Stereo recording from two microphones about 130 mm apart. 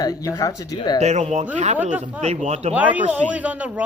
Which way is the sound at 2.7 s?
10° right (ahead or behind).